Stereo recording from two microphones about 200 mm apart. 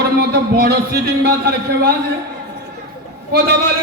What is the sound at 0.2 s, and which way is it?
A man's voice, 50° right (ahead or behind).